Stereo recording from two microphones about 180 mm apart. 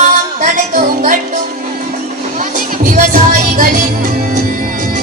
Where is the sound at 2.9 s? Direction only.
50° right (ahead or behind).